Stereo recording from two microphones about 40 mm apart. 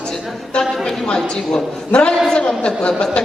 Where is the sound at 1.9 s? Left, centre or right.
Left.